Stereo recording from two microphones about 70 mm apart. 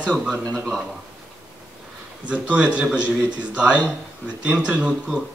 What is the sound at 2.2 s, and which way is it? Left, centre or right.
Speech, centre.